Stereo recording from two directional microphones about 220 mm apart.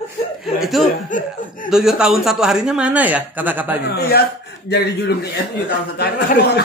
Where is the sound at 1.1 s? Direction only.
35° left (ahead or behind).